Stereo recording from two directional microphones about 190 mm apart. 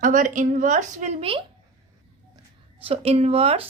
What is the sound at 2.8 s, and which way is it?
Speech, 30° right (ahead or behind).